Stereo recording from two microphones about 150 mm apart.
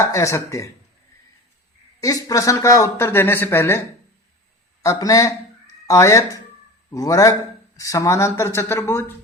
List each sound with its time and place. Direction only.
0.0 s speech: 20° left (ahead or behind)
2.0 s speech: 25° left (ahead or behind)
4.8 s speech: 25° left (ahead or behind)